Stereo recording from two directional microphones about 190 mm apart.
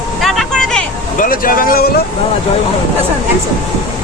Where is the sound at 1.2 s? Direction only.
50° left (ahead or behind).